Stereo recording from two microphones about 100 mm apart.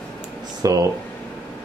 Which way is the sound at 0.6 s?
35° right (ahead or behind).